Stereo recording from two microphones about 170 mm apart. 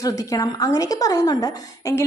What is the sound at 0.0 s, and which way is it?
A child's voice, 20° left (ahead or behind).